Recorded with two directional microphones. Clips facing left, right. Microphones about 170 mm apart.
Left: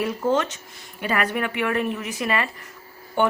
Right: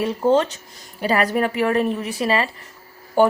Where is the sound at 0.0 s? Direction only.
30° right (ahead or behind).